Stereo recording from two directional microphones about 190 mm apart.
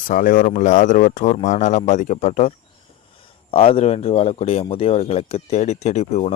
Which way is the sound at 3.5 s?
30° left (ahead or behind).